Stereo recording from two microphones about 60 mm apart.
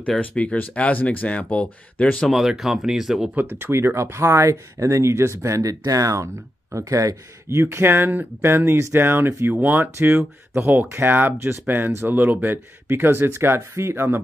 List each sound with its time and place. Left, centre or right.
0.2 s speech: left
2.3 s speech: centre
3.3 s speech: right
7.4 s speech: right
9.9 s speech: right